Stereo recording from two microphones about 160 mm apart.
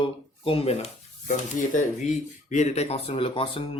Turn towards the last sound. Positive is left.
turn(degrees=35)  # may be behind; listen again after turning